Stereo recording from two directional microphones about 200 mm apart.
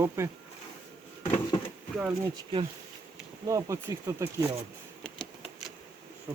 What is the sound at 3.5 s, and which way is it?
Speech, 15° right (ahead or behind).